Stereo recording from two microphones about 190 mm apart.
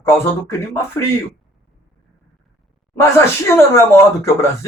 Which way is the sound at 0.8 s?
15° left (ahead or behind).